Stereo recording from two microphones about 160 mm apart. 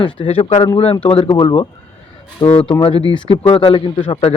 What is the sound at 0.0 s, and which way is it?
A man's voice, 35° left (ahead or behind).